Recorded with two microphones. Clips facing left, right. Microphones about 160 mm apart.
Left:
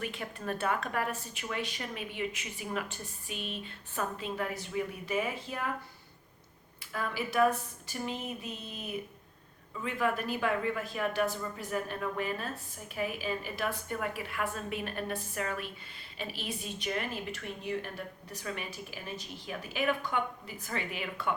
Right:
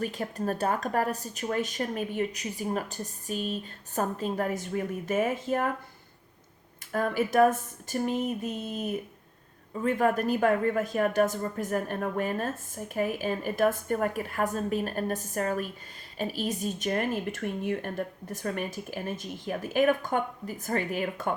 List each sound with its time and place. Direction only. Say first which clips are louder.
0.0 s speech: right 7 dB; 40° right (ahead or behind)
6.9 s speech: right 7 dB; 45° right (ahead or behind)